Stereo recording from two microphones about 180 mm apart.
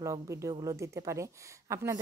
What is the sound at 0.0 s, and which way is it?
A woman's voice, 15° right (ahead or behind).